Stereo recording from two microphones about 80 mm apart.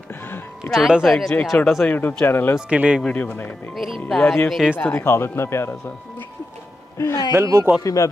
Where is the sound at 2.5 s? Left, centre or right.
Centre.